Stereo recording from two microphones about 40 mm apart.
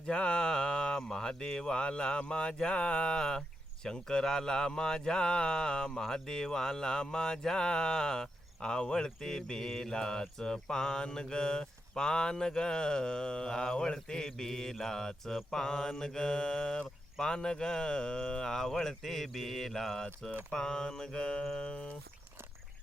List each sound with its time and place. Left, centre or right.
0.1 s speech: left
3.8 s mantra: centre
20.5 s speech: centre